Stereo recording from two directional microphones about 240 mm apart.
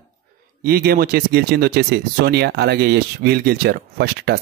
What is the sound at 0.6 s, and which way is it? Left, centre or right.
Speech, right.